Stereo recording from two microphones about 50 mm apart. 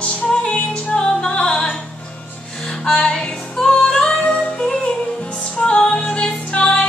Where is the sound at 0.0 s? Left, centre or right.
Centre.